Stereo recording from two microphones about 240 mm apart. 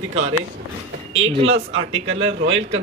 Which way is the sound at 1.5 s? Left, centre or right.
Right.